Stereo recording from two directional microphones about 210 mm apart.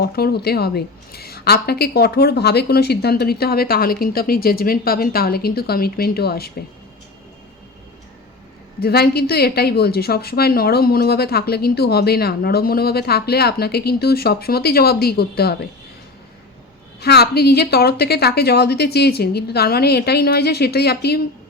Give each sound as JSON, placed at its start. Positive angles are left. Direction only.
{"t": 0.0, "sound": "a woman's voice", "side_deg": 50}
{"t": 8.8, "sound": "a woman's voice", "side_deg": 50}
{"t": 17.0, "sound": "a woman's voice", "side_deg": 50}